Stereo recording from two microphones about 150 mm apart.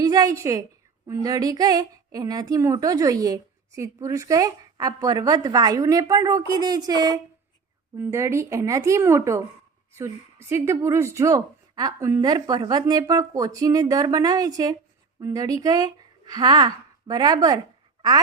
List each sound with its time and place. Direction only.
0.0 s a woman's voice: 25° right (ahead or behind)